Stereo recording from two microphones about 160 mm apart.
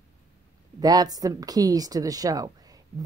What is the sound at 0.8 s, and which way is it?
Speech, 25° right (ahead or behind).